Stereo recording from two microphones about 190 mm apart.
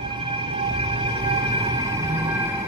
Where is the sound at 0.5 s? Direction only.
25° right (ahead or behind).